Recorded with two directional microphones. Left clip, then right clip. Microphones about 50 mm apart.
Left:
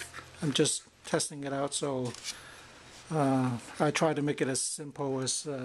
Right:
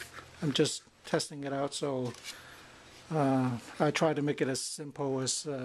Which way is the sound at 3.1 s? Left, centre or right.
Centre.